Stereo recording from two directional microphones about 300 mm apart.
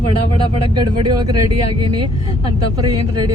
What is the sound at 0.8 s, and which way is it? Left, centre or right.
Music, centre.